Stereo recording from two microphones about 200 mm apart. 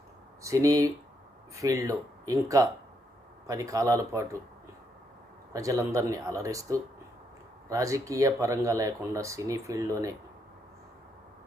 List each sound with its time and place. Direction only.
0.4 s speech: 15° right (ahead or behind)
5.5 s speech: 15° right (ahead or behind)